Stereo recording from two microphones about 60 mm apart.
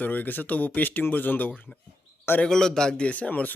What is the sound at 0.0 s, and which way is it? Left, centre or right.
Speech, left.